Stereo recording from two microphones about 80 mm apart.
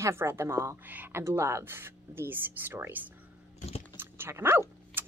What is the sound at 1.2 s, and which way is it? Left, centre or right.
Speech, right.